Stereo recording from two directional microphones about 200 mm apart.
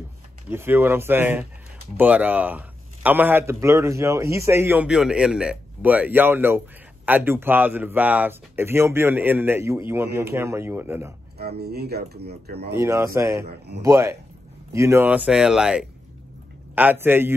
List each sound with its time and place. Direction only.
0.5 s a man's voice: 10° right (ahead or behind)
11.3 s speech: 50° right (ahead or behind)
12.7 s a man's voice: 15° right (ahead or behind)